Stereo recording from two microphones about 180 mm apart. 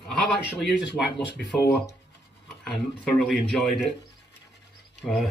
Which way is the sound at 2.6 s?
5° left (ahead or behind).